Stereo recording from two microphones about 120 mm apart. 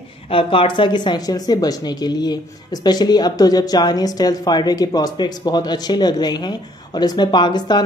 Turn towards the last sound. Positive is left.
turn(degrees=35)  # may be behind; listen again after turning